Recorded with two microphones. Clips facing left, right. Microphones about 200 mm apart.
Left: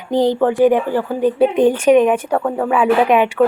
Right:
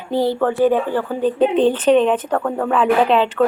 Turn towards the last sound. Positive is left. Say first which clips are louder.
# left 2 dB
turn(degrees=10)  # may be behind; listen again after turning